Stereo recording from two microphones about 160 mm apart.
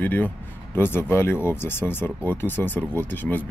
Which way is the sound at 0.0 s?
10° left (ahead or behind).